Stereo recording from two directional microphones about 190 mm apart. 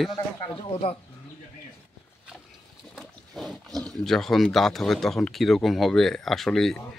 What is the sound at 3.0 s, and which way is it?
Speech, centre (ahead or behind).